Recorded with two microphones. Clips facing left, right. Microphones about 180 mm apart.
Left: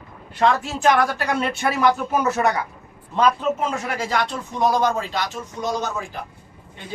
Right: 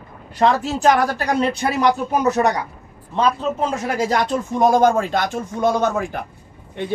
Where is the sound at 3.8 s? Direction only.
40° right (ahead or behind); by 6.2 s 55° right (ahead or behind).